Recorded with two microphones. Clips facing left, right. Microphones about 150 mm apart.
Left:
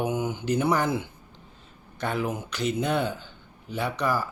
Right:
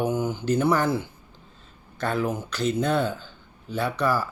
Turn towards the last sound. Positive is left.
turn(degrees=15)  # may be behind; listen again after turning